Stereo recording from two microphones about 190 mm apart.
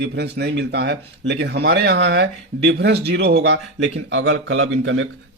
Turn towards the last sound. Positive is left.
turn(degrees=-75)  # may be behind; listen again after turning